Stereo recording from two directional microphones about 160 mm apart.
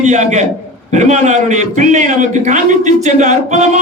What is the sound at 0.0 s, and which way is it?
A man's voice, 50° right (ahead or behind).